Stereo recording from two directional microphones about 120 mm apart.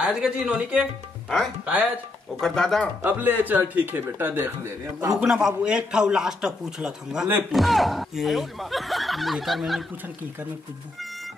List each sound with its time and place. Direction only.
0.0 s speech: 5° right (ahead or behind)
2.4 s speech: 5° left (ahead or behind)
3.0 s speech: 15° right (ahead or behind)
5.1 s speech: 5° right (ahead or behind)